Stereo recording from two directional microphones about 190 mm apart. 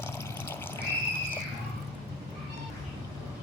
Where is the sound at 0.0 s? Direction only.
10° left (ahead or behind).